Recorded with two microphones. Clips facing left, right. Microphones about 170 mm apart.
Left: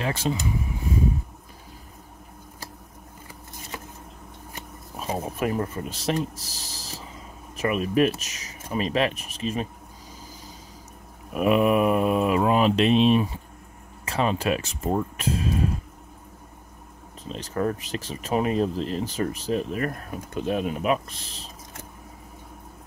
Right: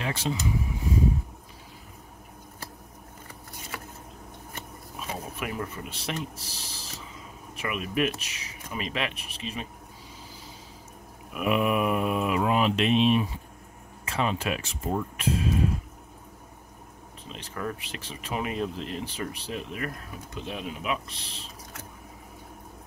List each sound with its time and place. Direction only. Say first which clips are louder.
0.0 s speech: left 4 dB; 45° left (ahead or behind)
3.7 s a sound: left 2 dB; 20° left (ahead or behind)
4.9 s speech: left 7 dB; 40° left (ahead or behind)
11.3 s speech: left 5 dB; 40° left (ahead or behind)
17.3 s speech: left 8 dB; 40° left (ahead or behind)